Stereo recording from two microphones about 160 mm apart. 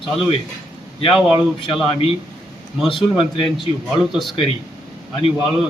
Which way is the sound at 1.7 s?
35° left (ahead or behind).